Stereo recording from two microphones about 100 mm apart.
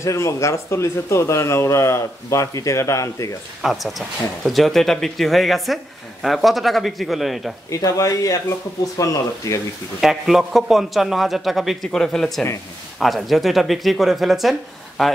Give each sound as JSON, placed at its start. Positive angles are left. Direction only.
{"t": 0.0, "sound": "speech", "side_deg": 30}
{"t": 3.6, "sound": "a man's voice", "side_deg": 0}
{"t": 7.7, "sound": "speech", "side_deg": 35}
{"t": 9.9, "sound": "a man's voice", "side_deg": -5}